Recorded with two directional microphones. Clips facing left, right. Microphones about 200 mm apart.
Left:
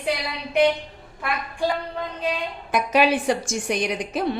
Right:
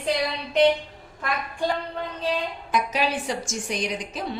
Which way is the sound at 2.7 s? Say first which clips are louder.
Left 6 dB; 60° left (ahead or behind).